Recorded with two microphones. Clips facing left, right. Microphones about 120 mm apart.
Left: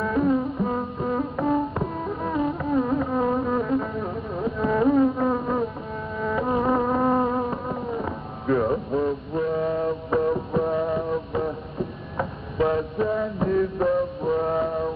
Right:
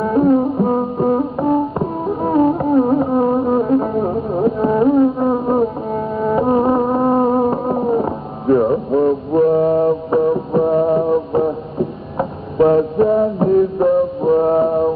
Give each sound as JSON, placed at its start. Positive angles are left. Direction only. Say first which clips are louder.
{"t": 0.0, "sound": "music", "louder": "right 8 dB", "side_deg": -30}
{"t": 5.9, "sound": "music", "louder": "right 9 dB", "side_deg": -35}
{"t": 7.7, "sound": "a sound", "louder": "right 12 dB", "side_deg": -40}
{"t": 8.0, "sound": "radio", "louder": "right 9 dB", "side_deg": -25}
{"t": 9.4, "sound": "music", "louder": "right 11 dB", "side_deg": -40}
{"t": 9.8, "sound": "music", "louder": "right 8 dB", "side_deg": -25}
{"t": 12.6, "sound": "music", "louder": "right 11 dB", "side_deg": -25}